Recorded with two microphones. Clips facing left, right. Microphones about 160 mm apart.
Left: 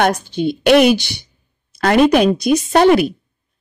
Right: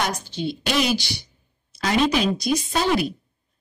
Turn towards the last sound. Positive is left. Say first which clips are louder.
# left 10 dB
turn(degrees=65)  # may be behind; listen again after turning